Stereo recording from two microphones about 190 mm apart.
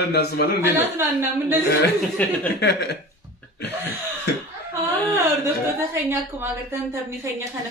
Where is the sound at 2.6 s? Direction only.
60° left (ahead or behind).